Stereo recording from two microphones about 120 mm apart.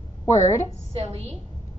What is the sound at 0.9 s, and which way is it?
Speech, 55° right (ahead or behind).